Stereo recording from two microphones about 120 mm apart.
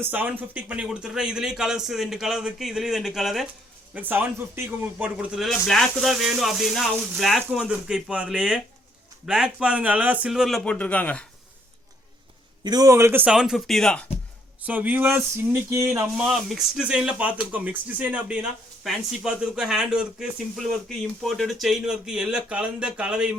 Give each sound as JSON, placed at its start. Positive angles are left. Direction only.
{"t": 0.0, "sound": "speech", "side_deg": -15}
{"t": 3.9, "sound": "speech", "side_deg": -15}
{"t": 5.0, "sound": "speech", "side_deg": -5}
{"t": 12.6, "sound": "speech", "side_deg": -30}
{"t": 13.2, "sound": "speech", "side_deg": -5}
{"t": 14.7, "sound": "speech", "side_deg": -15}
{"t": 16.1, "sound": "speech", "side_deg": -5}